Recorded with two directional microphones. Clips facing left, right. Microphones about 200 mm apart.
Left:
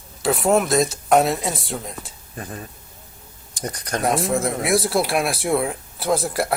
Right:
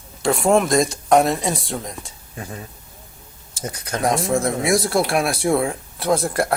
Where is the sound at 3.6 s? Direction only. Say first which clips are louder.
Even; centre (ahead or behind).